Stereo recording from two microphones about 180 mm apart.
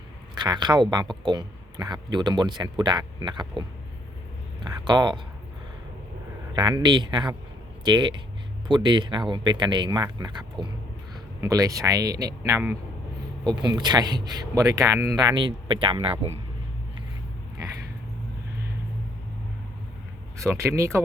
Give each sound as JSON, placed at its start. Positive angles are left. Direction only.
{"t": 0.3, "sound": "a man's voice", "side_deg": -25}
{"t": 4.6, "sound": "speech", "side_deg": -25}
{"t": 6.6, "sound": "a man's voice", "side_deg": -25}
{"t": 20.4, "sound": "speech", "side_deg": -15}